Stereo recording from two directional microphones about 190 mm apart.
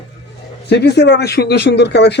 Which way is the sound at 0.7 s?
60° left (ahead or behind).